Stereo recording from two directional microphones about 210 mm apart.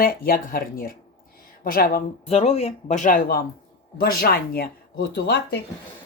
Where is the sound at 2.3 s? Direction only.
30° left (ahead or behind).